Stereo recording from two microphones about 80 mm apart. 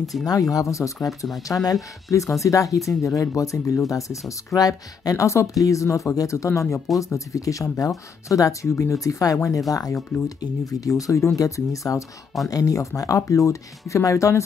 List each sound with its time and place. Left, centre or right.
0.0 s speech: centre
0.3 s speech: left